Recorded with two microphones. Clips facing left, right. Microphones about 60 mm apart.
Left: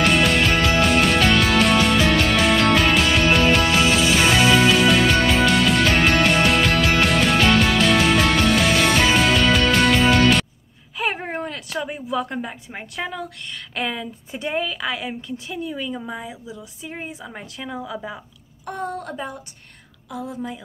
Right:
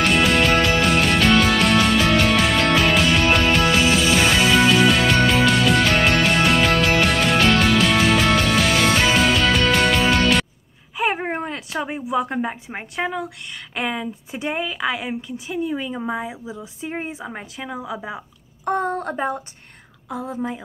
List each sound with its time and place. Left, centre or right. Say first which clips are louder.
0.0 s music: even; centre
11.0 s a woman's voice: right 3 dB; centre
15.6 s a woman's voice: right 5 dB; right
18.7 s a woman's voice: right 6 dB; right
20.1 s a woman's voice: right 3 dB; right